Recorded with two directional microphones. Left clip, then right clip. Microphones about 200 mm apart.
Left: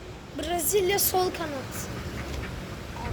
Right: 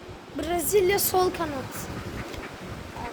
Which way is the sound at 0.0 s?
50° right (ahead or behind).